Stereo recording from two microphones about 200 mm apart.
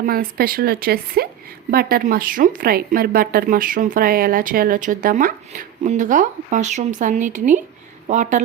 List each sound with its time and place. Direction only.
0.0 s a woman's voice: 45° right (ahead or behind)